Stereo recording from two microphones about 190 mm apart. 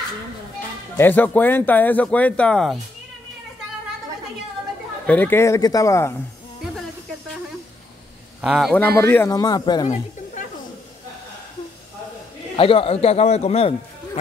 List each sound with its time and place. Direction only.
0.9 s speech: 10° left (ahead or behind)
5.0 s speech: 10° left (ahead or behind)
8.4 s speech: centre (ahead or behind); by 9.8 s 20° left (ahead or behind)
12.5 s a man's voice: 30° left (ahead or behind)